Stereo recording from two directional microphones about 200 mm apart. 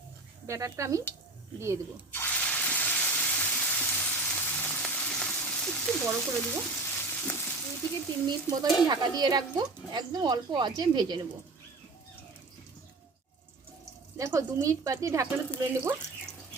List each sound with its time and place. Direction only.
0.4 s speech: 15° right (ahead or behind)
2.1 s water: 10° left (ahead or behind)
6.4 s frying: 10° left (ahead or behind)
8.5 s speech: 15° left (ahead or behind)
8.9 s speech: 20° right (ahead or behind)
14.2 s speech: 15° right (ahead or behind)